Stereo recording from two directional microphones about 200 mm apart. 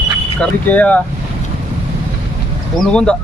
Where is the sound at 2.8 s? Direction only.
5° left (ahead or behind).